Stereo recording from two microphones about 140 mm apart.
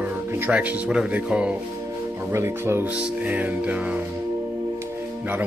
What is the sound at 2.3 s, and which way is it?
Speech, 20° right (ahead or behind).